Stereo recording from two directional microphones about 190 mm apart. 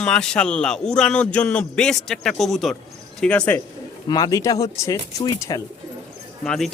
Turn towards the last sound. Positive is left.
turn(degrees=5)  # may be behind; listen again after turning